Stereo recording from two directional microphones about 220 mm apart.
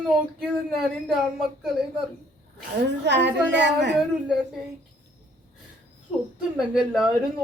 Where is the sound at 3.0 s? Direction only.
50° right (ahead or behind).